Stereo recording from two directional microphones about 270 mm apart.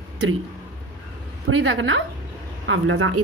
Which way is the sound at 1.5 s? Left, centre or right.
Right.